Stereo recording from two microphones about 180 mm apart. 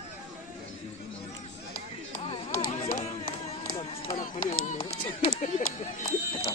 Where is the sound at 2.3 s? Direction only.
30° left (ahead or behind).